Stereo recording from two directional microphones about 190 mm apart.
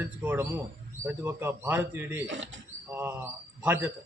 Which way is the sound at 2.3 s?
75° right (ahead or behind).